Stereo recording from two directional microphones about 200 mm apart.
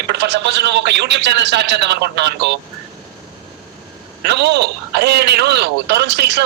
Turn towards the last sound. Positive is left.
turn(degrees=-55)  # may be behind; listen again after turning